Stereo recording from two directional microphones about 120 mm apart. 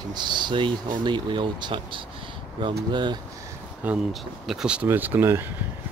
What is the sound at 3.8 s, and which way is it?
Speech, 15° right (ahead or behind).